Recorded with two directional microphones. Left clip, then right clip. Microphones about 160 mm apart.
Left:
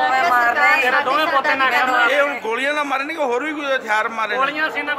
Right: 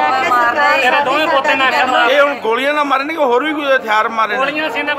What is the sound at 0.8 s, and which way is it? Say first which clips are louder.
Speech: right 4 dB; 10° right (ahead or behind).